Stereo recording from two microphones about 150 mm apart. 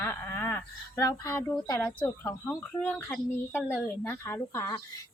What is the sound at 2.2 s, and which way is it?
A woman's voice, 20° left (ahead or behind).